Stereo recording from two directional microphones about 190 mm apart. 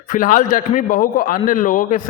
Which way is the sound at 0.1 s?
45° left (ahead or behind).